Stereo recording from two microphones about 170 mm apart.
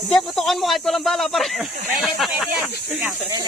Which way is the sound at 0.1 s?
Centre (ahead or behind).